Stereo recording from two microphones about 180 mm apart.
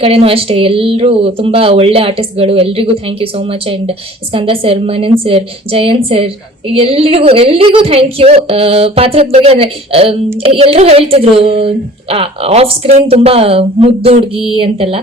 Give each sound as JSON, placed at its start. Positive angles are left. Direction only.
{"t": 0.0, "sound": "speech", "side_deg": -35}